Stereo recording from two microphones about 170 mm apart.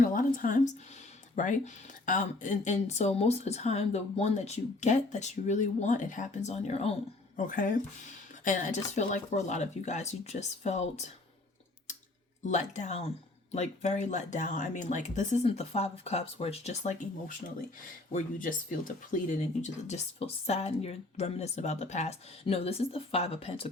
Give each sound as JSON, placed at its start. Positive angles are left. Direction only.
{"t": 0.1, "sound": "a sound", "side_deg": 55}
{"t": 1.4, "sound": "speech", "side_deg": 50}
{"t": 7.3, "sound": "speech", "side_deg": 55}
{"t": 12.5, "sound": "speech", "side_deg": 45}
{"t": 18.1, "sound": "speech", "side_deg": 50}